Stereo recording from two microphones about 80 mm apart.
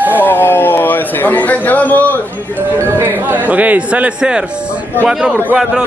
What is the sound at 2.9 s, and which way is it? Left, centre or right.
Speech, right.